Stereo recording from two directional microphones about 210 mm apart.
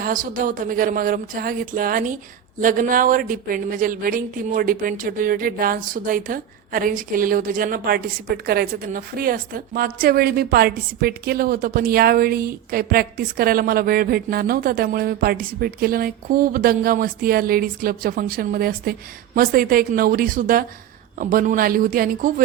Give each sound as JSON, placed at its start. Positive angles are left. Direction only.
{"t": 0.0, "sound": "a woman's voice", "side_deg": -40}